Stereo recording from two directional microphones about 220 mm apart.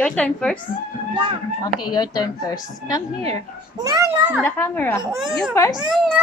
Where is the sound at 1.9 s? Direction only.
20° left (ahead or behind).